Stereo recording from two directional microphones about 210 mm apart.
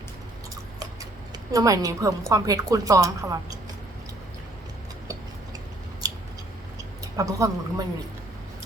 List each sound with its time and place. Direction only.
1.5 s a woman's voice: 15° right (ahead or behind)
7.2 s a woman's voice: 15° right (ahead or behind)